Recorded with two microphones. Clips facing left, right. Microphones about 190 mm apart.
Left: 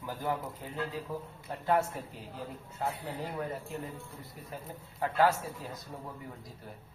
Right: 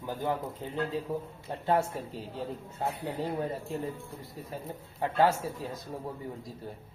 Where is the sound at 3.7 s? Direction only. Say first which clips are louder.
Right 5 dB; 30° right (ahead or behind).